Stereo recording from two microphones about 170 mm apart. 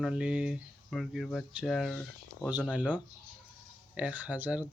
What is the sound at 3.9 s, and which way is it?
Speech, 10° right (ahead or behind).